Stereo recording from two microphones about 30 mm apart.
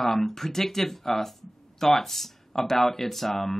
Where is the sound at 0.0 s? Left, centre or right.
Centre.